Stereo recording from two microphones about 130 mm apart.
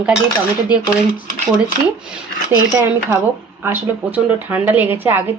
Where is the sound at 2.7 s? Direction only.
20° right (ahead or behind).